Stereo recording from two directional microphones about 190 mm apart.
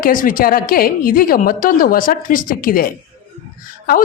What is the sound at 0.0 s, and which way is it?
Speech, 45° left (ahead or behind).